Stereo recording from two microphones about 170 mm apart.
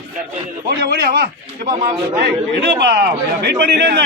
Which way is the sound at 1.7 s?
30° right (ahead or behind).